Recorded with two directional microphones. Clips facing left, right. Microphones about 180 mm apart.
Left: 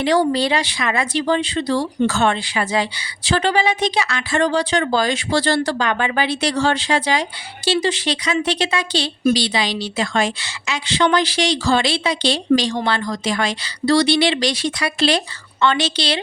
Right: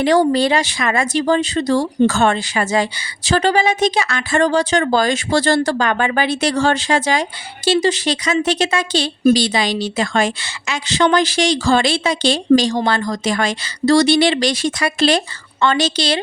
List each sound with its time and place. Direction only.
0.0 s speech: 45° right (ahead or behind)